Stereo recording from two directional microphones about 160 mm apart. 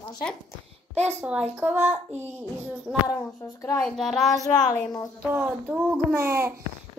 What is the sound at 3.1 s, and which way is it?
Speech, 20° left (ahead or behind).